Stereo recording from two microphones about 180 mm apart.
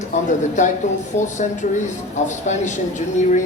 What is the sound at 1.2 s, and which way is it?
Speech, 45° left (ahead or behind).